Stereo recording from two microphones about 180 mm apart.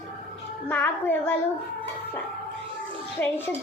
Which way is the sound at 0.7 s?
10° left (ahead or behind).